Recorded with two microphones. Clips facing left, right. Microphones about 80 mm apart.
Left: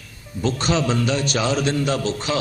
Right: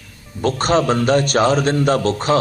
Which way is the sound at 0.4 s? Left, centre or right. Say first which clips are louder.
Right 5 dB; right.